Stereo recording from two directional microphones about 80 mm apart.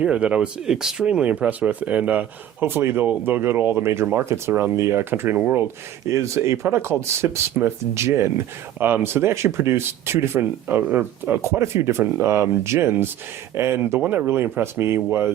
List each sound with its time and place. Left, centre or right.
0.0 s speech: centre
6.1 s speech: right
14.0 s speech: right